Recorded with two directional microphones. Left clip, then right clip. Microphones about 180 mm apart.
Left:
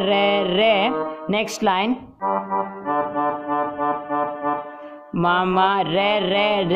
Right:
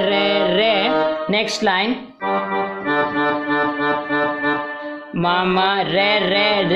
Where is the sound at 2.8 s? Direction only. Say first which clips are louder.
Right 4 dB; 45° right (ahead or behind).